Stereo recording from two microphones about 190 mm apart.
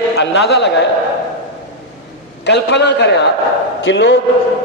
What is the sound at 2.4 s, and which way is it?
A woman's voice, 65° left (ahead or behind).